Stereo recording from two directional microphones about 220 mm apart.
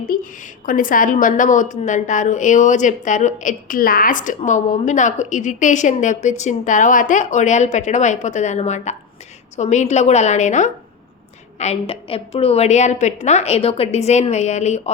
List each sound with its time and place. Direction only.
0.6 s a woman's voice: 40° left (ahead or behind)